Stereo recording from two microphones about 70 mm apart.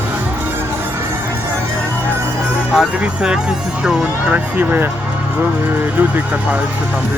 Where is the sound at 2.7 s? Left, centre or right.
Centre.